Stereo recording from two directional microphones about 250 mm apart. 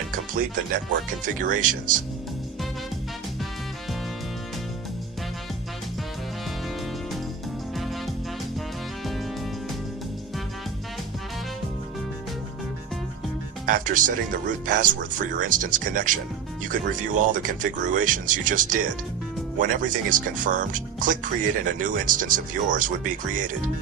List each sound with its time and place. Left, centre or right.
0.3 s speech: right
13.7 s speech: right